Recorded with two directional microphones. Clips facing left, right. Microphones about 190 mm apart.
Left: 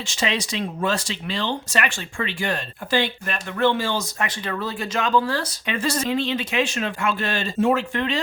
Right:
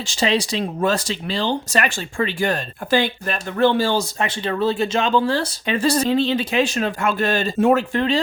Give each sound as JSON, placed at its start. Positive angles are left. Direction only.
{"t": 0.0, "sound": "speech", "side_deg": -35}
{"t": 7.9, "sound": "speech", "side_deg": -35}